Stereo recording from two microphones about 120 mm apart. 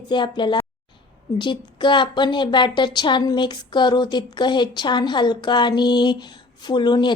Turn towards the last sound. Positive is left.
turn(degrees=40)  # may be behind; listen again after turning